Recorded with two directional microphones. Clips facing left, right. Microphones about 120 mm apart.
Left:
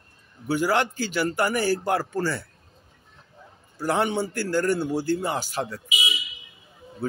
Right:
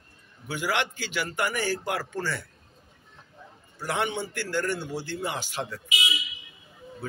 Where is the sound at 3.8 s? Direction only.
35° left (ahead or behind).